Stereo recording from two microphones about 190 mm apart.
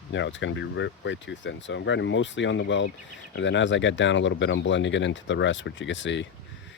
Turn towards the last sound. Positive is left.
turn(degrees=70)  # may be behind; listen again after turning